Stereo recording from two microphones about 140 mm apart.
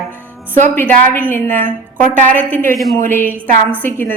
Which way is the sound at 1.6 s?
75° right (ahead or behind).